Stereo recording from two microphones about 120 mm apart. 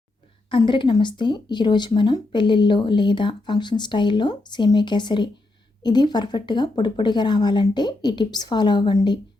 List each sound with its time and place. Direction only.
0.5 s speech: 40° left (ahead or behind)